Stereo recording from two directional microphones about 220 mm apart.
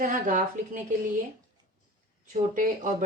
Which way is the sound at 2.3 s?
35° right (ahead or behind).